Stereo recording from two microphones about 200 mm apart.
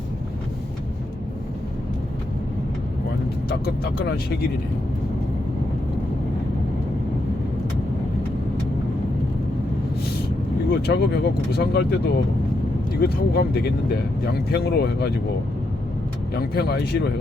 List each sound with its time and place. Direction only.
3.5 s speech: 55° left (ahead or behind)
10.7 s speech: 55° left (ahead or behind)
16.3 s speech: 55° left (ahead or behind)